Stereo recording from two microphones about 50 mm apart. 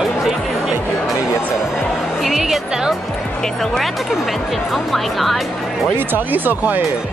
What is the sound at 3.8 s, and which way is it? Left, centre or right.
Speech, centre.